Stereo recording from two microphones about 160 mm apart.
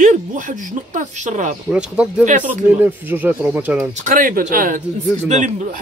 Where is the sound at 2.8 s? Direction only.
10° right (ahead or behind).